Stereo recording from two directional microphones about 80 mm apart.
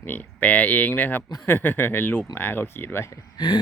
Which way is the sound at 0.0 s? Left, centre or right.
Left.